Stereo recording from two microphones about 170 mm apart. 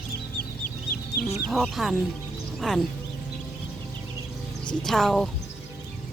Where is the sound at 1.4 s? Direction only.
Centre (ahead or behind).